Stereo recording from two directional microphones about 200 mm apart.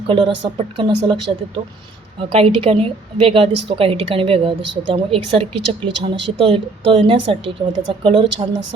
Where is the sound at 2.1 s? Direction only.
30° right (ahead or behind).